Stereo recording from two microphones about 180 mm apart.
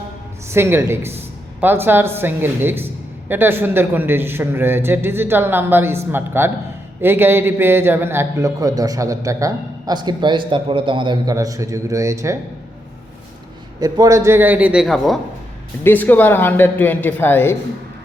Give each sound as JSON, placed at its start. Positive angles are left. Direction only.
{"t": 0.4, "sound": "a man's voice", "side_deg": -15}
{"t": 13.7, "sound": "a man's voice", "side_deg": -20}